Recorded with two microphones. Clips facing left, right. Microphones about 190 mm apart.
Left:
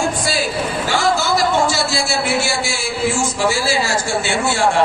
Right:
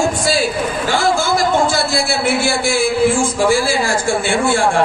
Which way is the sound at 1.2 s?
50° right (ahead or behind).